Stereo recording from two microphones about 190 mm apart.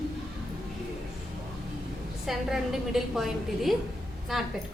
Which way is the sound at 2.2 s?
Centre (ahead or behind).